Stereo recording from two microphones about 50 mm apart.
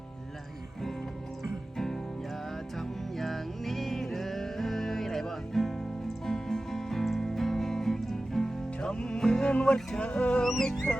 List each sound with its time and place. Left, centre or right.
2.7 s music: centre
9.5 s music: left
10.0 s a sound: left